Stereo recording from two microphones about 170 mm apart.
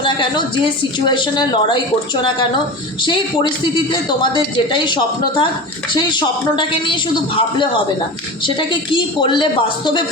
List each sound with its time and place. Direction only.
0.0 s a woman's voice: 30° left (ahead or behind)
3.0 s a woman's voice: 25° left (ahead or behind)